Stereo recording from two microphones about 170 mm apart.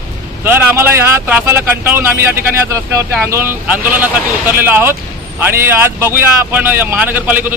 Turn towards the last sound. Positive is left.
turn(degrees=-10)  # may be behind; listen again after turning